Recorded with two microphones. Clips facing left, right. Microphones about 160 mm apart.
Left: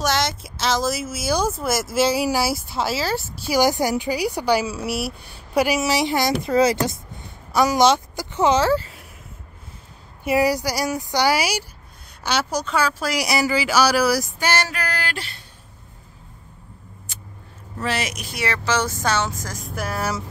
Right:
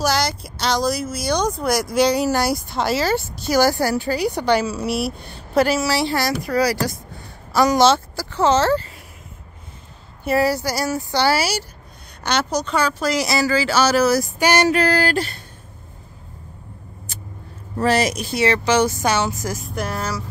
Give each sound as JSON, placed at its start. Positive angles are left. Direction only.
{"t": 0.0, "sound": "speech", "side_deg": 0}
{"t": 3.5, "sound": "a woman's voice", "side_deg": 15}
{"t": 6.4, "sound": "a sound", "side_deg": 25}
{"t": 7.6, "sound": "a woman's voice", "side_deg": 10}
{"t": 10.2, "sound": "a woman's voice", "side_deg": 15}
{"t": 14.4, "sound": "female singing", "side_deg": -20}
{"t": 17.7, "sound": "speech", "side_deg": -40}
{"t": 19.7, "sound": "speech", "side_deg": 5}